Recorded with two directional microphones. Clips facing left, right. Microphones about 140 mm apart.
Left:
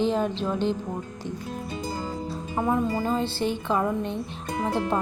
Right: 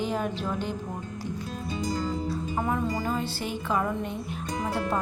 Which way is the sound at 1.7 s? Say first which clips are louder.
Right 4 dB; 25° left (ahead or behind).